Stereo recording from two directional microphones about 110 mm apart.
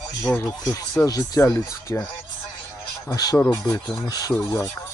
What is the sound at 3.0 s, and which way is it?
Speech, 30° left (ahead or behind).